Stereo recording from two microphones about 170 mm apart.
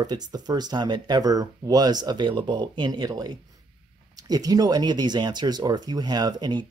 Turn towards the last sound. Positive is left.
turn(degrees=-25)  # may be behind; listen again after turning